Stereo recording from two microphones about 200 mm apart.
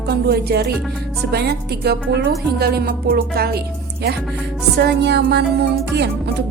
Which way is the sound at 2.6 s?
50° right (ahead or behind).